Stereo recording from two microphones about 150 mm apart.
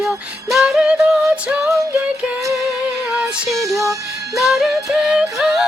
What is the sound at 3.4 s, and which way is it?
Music, 20° right (ahead or behind).